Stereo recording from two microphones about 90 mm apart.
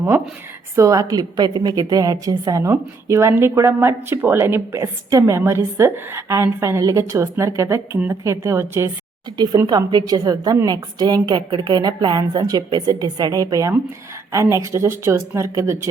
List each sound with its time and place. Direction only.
0.8 s a woman's voice: 40° right (ahead or behind)
9.6 s a woman's voice: 50° right (ahead or behind); by 15.9 s 30° right (ahead or behind)